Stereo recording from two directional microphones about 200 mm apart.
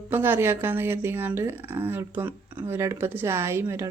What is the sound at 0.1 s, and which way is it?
Speech, 10° right (ahead or behind).